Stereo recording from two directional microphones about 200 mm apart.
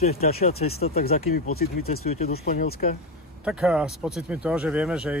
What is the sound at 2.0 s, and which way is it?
Speech, 30° left (ahead or behind).